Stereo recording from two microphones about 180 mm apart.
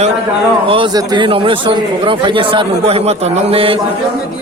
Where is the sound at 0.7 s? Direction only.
25° right (ahead or behind).